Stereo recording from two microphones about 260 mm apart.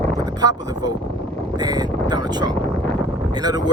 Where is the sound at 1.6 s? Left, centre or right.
Centre.